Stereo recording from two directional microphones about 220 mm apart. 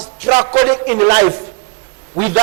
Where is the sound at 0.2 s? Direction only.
15° right (ahead or behind).